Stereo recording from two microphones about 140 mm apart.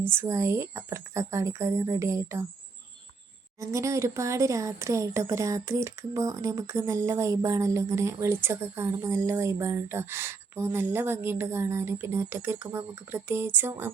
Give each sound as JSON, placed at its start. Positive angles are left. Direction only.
{"t": 0.0, "sound": "speech", "side_deg": -15}
{"t": 3.6, "sound": "speech", "side_deg": -20}